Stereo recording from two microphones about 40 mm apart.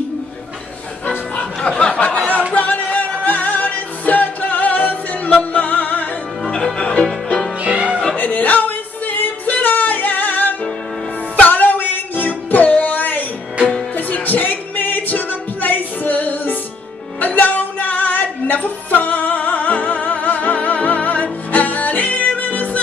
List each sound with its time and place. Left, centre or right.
1.0 s music: left
2.0 s a sound: left
2.5 s music: left
6.4 s music: centre
7.6 s music: right
8.2 s music: left